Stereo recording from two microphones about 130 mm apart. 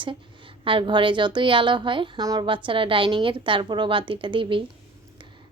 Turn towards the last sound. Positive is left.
turn(degrees=-40)  # may be behind; listen again after turning